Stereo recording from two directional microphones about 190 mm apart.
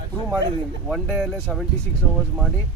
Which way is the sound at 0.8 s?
Centre (ahead or behind).